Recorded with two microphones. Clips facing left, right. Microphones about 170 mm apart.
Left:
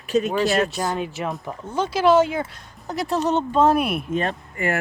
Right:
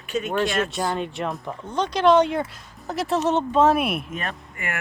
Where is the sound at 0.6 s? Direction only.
Centre (ahead or behind).